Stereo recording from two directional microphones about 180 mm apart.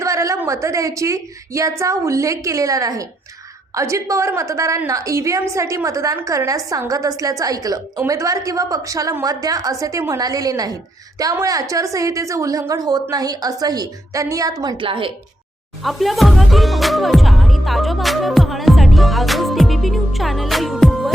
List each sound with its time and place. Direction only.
0.0 s a woman's voice: 15° right (ahead or behind)
15.8 s music: centre (ahead or behind)